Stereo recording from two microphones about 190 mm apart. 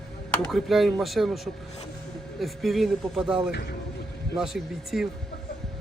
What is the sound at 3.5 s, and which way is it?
Speech, 60° left (ahead or behind).